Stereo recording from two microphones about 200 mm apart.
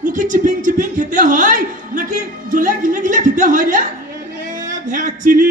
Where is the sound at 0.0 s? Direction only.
40° right (ahead or behind).